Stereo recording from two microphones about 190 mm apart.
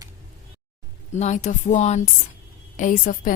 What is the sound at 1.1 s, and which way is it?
A woman's voice, 40° left (ahead or behind).